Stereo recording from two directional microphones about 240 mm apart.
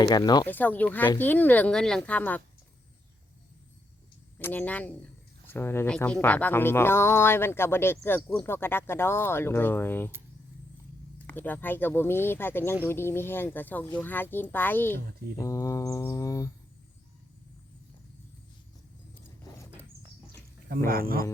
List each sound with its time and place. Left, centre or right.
0.1 s speech: centre
4.4 s speech: centre
11.3 s speech: centre
20.7 s speech: right